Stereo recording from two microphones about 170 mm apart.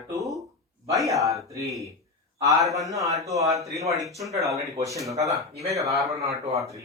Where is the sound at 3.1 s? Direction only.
20° right (ahead or behind).